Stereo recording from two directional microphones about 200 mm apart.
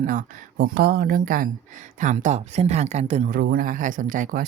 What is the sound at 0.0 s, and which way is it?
Speech, 40° right (ahead or behind).